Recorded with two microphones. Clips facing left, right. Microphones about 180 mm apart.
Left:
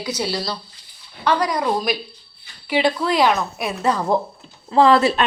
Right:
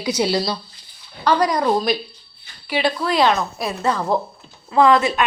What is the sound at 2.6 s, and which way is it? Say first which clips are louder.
A woman's voice: left 2 dB; 20° left (ahead or behind).